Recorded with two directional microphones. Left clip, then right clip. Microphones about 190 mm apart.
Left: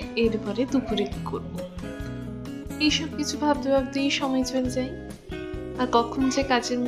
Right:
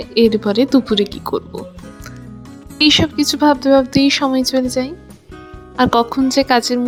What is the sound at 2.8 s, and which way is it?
A woman's voice, 50° right (ahead or behind).